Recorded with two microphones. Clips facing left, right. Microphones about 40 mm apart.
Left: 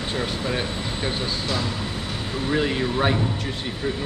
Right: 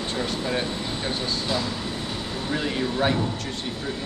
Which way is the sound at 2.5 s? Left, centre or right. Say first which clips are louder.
Left 3 dB; centre.